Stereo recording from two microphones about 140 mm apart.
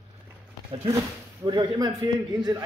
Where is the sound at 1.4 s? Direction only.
25° right (ahead or behind).